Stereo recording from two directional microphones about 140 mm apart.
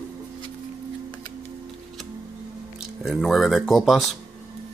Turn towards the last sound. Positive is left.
turn(degrees=0)  # may be behind; listen again after turning